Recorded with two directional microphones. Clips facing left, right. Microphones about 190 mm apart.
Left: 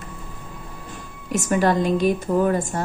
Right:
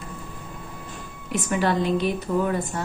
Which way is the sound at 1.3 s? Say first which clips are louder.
Left 4 dB; 45° left (ahead or behind).